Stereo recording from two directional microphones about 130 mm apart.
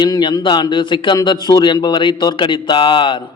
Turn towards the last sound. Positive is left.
turn(degrees=40)  # may be behind; listen again after turning